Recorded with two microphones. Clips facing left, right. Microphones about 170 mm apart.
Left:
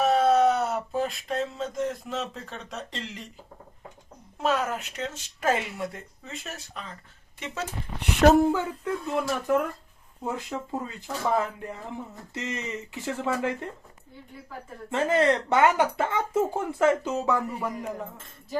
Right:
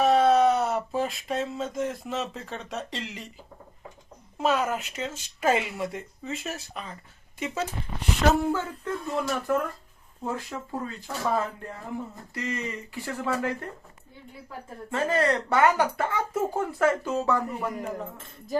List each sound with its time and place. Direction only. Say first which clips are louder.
0.0 s a sound: right 1 dB; centre (ahead or behind)
4.4 s speech: right 1 dB; centre (ahead or behind)
8.2 s speech: left 5 dB; 50° left (ahead or behind)
8.5 s speech: left 2 dB; 15° left (ahead or behind)
14.8 s speech: left 2 dB; 20° left (ahead or behind)